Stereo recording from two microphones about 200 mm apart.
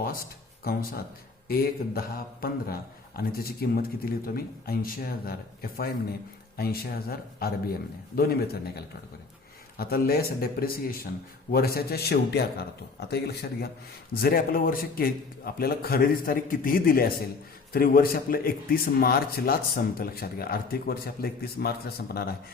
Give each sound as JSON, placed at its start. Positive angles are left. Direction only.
{"t": 0.6, "sound": "speech", "side_deg": 50}
{"t": 9.7, "sound": "speech", "side_deg": 45}